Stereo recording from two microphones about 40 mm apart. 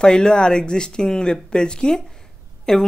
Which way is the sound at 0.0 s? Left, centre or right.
Centre.